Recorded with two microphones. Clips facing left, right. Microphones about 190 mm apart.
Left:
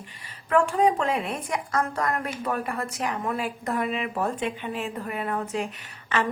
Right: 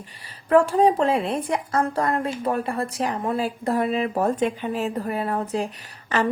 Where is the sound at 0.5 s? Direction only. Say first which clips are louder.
Right 4 dB; 35° right (ahead or behind).